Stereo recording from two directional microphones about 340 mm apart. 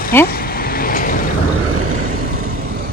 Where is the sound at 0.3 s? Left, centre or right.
Left.